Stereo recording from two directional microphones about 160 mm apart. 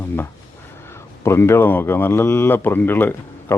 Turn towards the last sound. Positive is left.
turn(degrees=10)  # may be behind; listen again after turning